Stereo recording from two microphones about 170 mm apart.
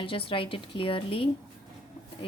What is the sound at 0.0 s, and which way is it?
A woman's voice, 30° left (ahead or behind).